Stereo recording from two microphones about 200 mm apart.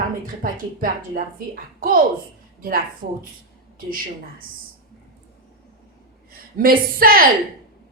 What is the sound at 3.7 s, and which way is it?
Speech, 45° right (ahead or behind).